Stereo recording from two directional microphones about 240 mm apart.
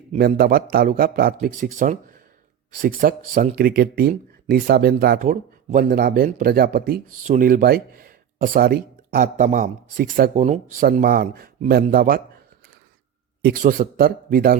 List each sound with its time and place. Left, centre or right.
0.2 s speech: right
13.4 s speech: right